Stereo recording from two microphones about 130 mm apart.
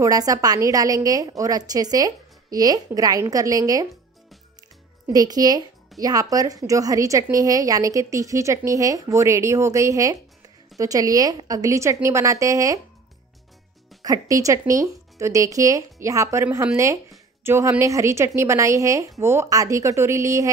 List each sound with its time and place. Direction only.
0.0 s a woman's voice: 25° right (ahead or behind)
5.1 s a woman's voice: 30° right (ahead or behind)
14.0 s a woman's voice: 25° right (ahead or behind)